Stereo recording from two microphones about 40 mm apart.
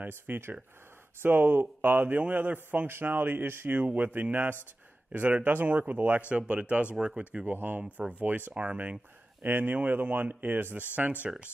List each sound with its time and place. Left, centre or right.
0.4 s speech: right
3.8 s speech: right
5.1 s speech: right
6.2 s speech: right
7.6 s speech: right
11.2 s speech: right